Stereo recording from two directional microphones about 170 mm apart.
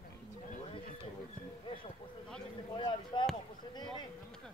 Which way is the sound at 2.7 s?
25° left (ahead or behind).